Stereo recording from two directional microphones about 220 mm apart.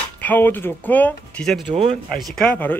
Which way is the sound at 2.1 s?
5° left (ahead or behind).